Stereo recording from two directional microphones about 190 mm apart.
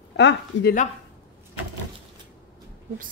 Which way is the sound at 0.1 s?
65° left (ahead or behind).